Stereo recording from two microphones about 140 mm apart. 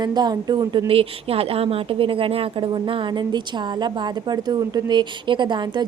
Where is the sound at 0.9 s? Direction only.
45° right (ahead or behind).